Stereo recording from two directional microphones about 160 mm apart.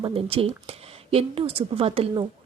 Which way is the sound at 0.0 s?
35° right (ahead or behind).